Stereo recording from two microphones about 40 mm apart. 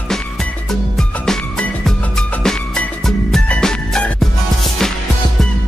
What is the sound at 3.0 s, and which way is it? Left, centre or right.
Music, centre.